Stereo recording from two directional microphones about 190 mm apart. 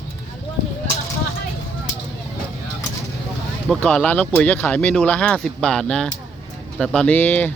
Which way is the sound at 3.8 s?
5° left (ahead or behind).